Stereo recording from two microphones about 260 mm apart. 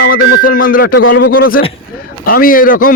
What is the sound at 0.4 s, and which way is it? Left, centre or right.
Speech, left.